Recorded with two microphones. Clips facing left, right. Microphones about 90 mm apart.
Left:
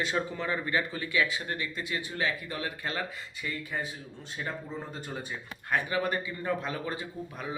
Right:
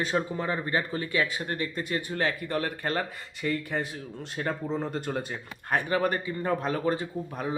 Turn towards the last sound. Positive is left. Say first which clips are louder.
# right 5 dB
turn(degrees=-40)  # may be behind; listen again after turning